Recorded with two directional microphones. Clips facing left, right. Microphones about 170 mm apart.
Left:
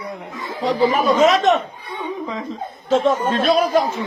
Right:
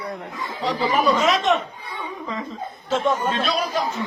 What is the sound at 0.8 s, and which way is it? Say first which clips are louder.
Speech: left 5 dB; 45° left (ahead or behind).